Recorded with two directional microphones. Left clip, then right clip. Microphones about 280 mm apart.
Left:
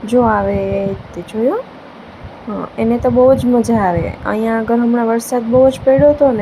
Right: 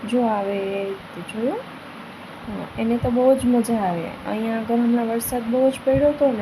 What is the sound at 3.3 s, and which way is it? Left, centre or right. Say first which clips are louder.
Speech: left 7 dB; centre.